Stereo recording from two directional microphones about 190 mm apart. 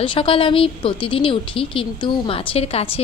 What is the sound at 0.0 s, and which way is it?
A woman's voice, 30° left (ahead or behind).